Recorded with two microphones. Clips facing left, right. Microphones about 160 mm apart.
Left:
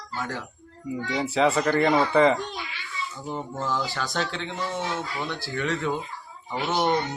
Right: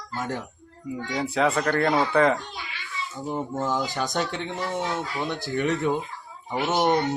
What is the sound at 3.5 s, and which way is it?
Speech, 15° right (ahead or behind).